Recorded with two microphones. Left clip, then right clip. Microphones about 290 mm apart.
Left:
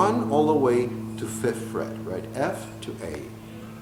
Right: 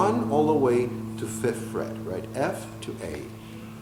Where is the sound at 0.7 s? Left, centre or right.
Centre.